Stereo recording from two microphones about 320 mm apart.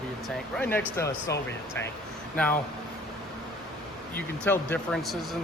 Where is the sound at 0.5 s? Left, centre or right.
Centre.